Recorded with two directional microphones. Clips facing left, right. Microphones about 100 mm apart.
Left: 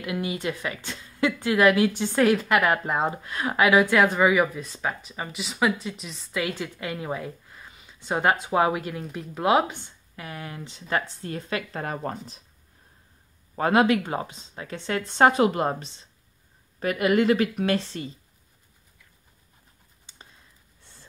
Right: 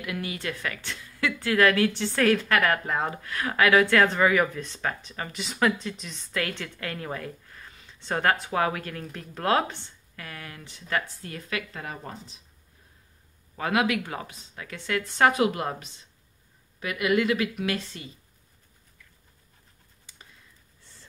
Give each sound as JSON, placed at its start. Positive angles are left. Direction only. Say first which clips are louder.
{"t": 0.0, "sound": "a woman's voice", "louder": "left 4 dB", "side_deg": 20}
{"t": 11.8, "sound": "speech", "louder": "left 7 dB", "side_deg": 50}
{"t": 13.6, "sound": "a woman's voice", "louder": "left 5 dB", "side_deg": 35}
{"t": 20.1, "sound": "a sound", "louder": "left 2 dB", "side_deg": 25}